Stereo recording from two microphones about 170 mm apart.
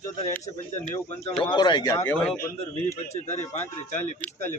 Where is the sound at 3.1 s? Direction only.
40° left (ahead or behind).